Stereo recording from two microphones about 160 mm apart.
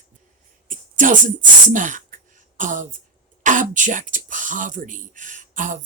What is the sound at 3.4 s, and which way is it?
Speech, 55° right (ahead or behind).